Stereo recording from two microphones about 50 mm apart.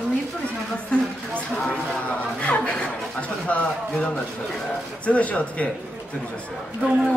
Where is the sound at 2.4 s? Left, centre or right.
Left.